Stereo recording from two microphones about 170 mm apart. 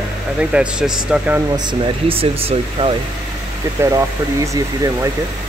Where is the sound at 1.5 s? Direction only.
30° right (ahead or behind).